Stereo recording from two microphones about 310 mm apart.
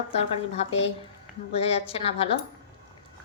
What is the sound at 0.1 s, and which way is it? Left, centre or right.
A woman's voice, centre.